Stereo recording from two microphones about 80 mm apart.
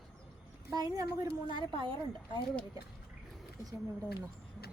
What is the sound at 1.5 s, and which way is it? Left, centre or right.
Speech, right.